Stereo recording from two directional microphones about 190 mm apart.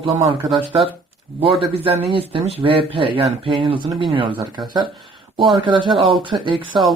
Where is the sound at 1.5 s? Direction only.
30° right (ahead or behind).